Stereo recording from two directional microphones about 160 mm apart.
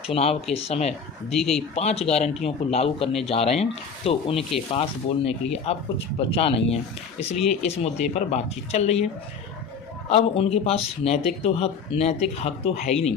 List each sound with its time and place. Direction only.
0.1 s speech: 40° left (ahead or behind)
1.3 s speech: centre (ahead or behind)
1.8 s speech: 40° left (ahead or behind)
10.0 s speech: 40° left (ahead or behind)